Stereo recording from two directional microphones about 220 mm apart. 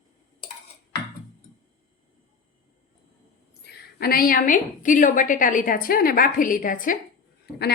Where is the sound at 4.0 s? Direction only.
40° left (ahead or behind).